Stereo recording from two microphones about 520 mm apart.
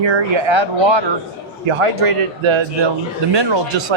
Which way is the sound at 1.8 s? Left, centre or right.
Right.